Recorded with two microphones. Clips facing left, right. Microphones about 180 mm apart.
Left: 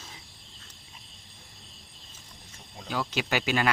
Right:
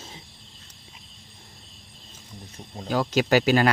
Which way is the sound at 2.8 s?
40° right (ahead or behind).